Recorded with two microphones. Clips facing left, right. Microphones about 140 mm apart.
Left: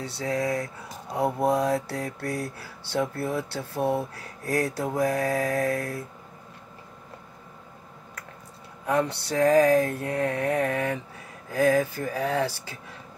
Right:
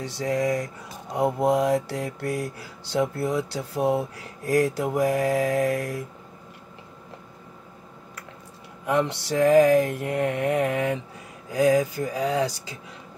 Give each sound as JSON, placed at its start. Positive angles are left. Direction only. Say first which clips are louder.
{"t": 0.2, "sound": "mantra", "louder": "right 3 dB", "side_deg": -15}
{"t": 8.8, "sound": "mantra", "louder": "right 1 dB", "side_deg": -15}